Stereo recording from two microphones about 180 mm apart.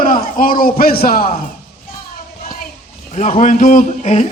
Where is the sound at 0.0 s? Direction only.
50° left (ahead or behind).